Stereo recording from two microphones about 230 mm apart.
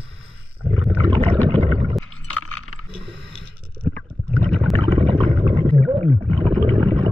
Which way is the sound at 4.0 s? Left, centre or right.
Centre.